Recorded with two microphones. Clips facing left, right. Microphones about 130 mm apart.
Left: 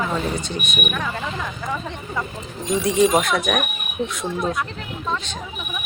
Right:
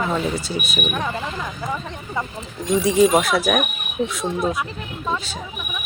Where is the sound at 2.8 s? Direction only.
5° right (ahead or behind).